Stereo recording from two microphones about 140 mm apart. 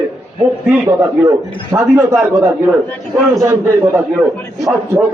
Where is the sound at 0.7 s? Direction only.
15° right (ahead or behind).